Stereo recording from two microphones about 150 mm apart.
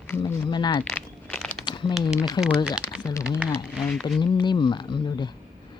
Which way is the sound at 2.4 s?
25° left (ahead or behind).